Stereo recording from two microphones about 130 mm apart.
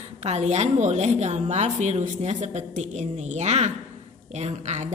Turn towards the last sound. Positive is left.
turn(degrees=-60)  # may be behind; listen again after turning